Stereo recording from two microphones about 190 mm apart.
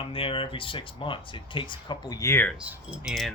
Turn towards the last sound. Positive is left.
turn(degrees=0)  # may be behind; listen again after turning